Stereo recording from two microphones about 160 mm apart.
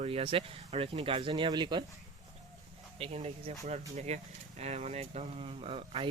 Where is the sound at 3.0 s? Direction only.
40° right (ahead or behind).